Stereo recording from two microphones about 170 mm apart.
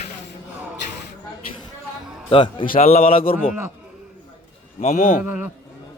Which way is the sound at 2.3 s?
30° left (ahead or behind).